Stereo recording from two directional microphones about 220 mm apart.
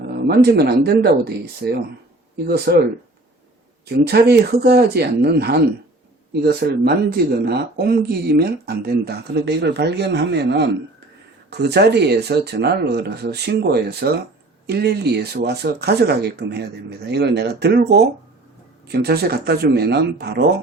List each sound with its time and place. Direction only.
0.3 s speech: 45° right (ahead or behind)
4.0 s speech: 45° right (ahead or behind)